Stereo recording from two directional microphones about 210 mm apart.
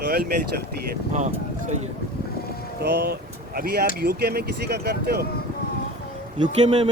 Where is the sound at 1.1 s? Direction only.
35° right (ahead or behind).